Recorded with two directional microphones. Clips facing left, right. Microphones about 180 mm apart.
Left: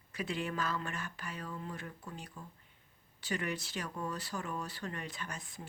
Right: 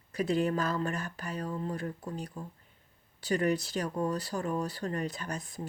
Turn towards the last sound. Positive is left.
turn(degrees=-40)  # may be behind; listen again after turning